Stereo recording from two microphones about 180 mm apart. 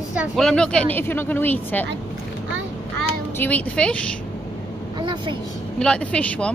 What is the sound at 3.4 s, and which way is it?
Speech, 10° left (ahead or behind).